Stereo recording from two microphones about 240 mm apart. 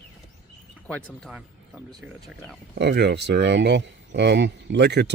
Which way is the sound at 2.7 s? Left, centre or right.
Right.